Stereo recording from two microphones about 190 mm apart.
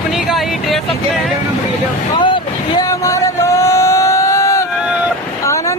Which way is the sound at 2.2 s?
25° left (ahead or behind).